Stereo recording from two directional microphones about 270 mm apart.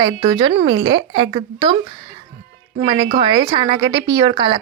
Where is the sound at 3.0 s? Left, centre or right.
Centre.